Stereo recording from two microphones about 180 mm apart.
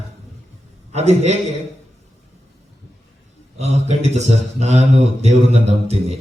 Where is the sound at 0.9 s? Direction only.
40° right (ahead or behind).